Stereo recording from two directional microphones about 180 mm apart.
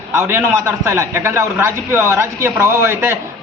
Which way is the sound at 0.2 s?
15° right (ahead or behind).